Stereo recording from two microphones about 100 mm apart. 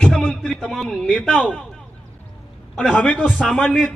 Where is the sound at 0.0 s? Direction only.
5° left (ahead or behind).